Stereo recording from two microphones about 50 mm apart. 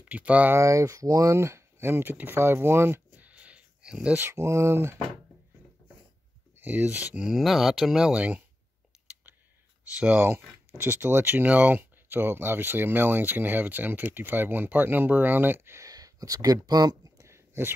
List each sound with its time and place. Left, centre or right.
0.0 s speech: right
0.6 s speech: right
3.2 s a sound: right
4.2 s speech: right
6.6 s speech: right
7.2 s speech: centre
8.1 s speech: right
8.9 s a sound: centre
9.9 s speech: centre
10.8 s speech: right
11.4 s speech: right